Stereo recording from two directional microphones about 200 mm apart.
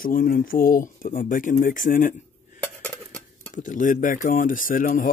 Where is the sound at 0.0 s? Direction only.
45° left (ahead or behind).